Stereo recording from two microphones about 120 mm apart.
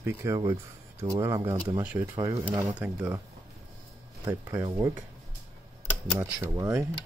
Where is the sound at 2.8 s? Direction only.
10° right (ahead or behind).